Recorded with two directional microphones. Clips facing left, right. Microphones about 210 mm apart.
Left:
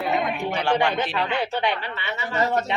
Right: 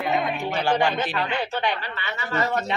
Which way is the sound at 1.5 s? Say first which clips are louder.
Left 1 dB; 20° left (ahead or behind).